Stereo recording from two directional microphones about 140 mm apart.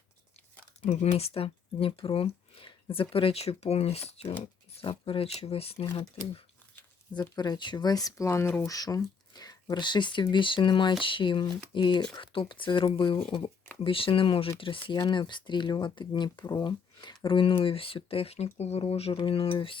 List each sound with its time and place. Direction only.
0.8 s speech: 50° left (ahead or behind)
7.1 s speech: 30° left (ahead or behind)